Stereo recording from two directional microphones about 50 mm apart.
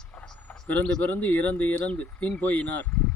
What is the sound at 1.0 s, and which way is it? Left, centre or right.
Speech, left.